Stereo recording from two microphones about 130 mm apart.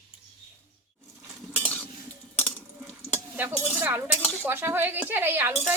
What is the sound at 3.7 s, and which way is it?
Chink, 15° right (ahead or behind).